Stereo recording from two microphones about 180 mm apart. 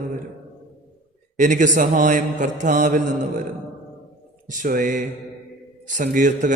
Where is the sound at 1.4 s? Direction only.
45° right (ahead or behind).